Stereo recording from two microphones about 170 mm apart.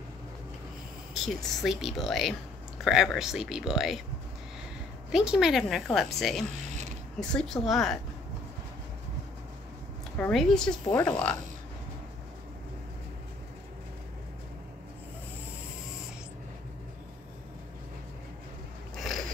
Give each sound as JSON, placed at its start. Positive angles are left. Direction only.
{"t": 1.2, "sound": "a woman's voice", "side_deg": 0}
{"t": 5.1, "sound": "a woman's voice", "side_deg": -5}
{"t": 10.1, "sound": "a woman's voice", "side_deg": 5}